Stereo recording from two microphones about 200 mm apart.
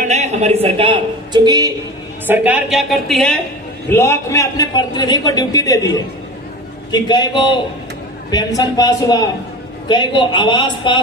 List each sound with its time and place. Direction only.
0.0 s a man's voice: 35° right (ahead or behind); by 1.7 s 20° right (ahead or behind)
2.2 s a woman's voice: 10° right (ahead or behind)
3.9 s a man's voice: 15° left (ahead or behind)
6.9 s a man's voice: 20° left (ahead or behind)